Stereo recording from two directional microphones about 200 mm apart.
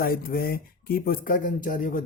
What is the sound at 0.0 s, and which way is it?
Speech, 45° left (ahead or behind).